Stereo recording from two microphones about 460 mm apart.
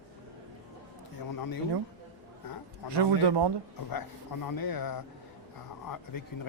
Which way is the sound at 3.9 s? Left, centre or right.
Left.